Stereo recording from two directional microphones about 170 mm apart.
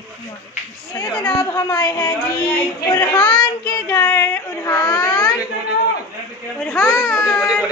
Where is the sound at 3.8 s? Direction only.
15° left (ahead or behind).